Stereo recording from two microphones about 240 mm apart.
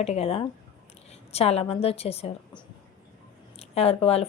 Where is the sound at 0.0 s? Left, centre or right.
Left.